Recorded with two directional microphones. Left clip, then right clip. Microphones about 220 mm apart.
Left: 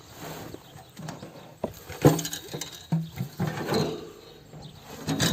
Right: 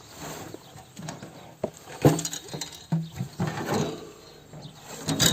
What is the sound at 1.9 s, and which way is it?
Patter, centre (ahead or behind).